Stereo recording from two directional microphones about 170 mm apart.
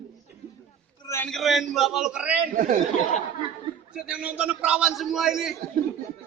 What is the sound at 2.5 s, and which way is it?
Speech, 50° right (ahead or behind).